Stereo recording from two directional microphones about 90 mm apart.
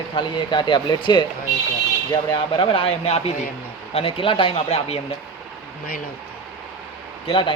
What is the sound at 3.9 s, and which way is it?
Speech, 85° left.